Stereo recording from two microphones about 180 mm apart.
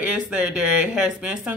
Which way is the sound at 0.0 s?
5° right (ahead or behind).